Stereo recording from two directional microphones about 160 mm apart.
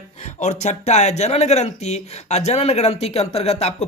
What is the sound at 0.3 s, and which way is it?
Speech, 45° left (ahead or behind).